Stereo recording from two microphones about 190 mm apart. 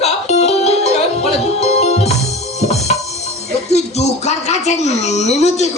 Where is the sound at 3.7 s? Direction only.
35° left (ahead or behind).